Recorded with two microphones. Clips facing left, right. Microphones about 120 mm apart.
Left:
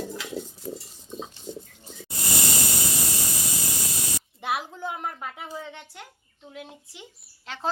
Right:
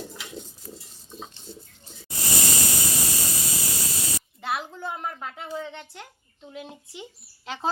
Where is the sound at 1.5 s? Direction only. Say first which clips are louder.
Left 6 dB; 15° left (ahead or behind).